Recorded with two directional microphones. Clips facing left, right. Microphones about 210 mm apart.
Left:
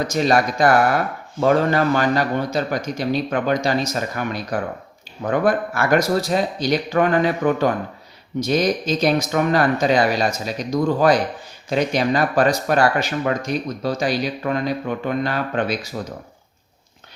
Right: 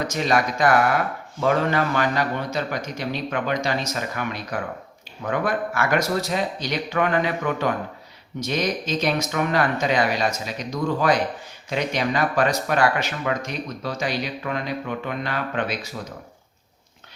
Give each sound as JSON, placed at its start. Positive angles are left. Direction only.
{"t": 0.1, "sound": "speech", "side_deg": 35}